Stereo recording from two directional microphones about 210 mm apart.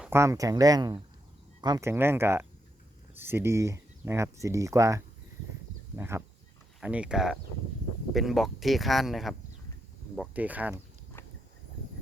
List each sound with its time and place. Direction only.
0.0 s speech: 10° right (ahead or behind)